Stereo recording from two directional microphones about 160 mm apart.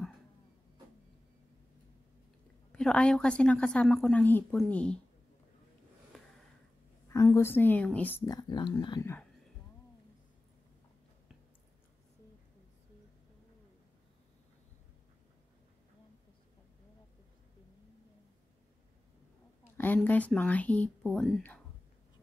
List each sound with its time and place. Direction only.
2.7 s a woman's voice: 5° left (ahead or behind)
6.1 s a sound: centre (ahead or behind)
7.1 s a woman's voice: 20° left (ahead or behind)
8.3 s speech: 25° left (ahead or behind)
19.8 s a woman's voice: 10° left (ahead or behind)